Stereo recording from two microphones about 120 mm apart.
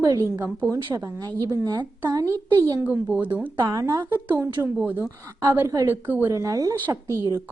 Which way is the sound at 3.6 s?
30° right (ahead or behind).